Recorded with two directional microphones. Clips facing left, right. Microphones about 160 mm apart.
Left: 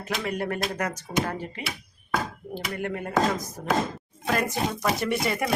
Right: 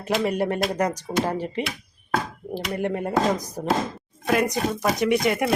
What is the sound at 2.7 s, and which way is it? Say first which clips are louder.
Speech: right 3 dB; 35° right (ahead or behind).